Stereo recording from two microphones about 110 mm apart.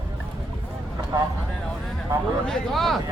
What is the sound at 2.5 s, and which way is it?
Speech, centre (ahead or behind).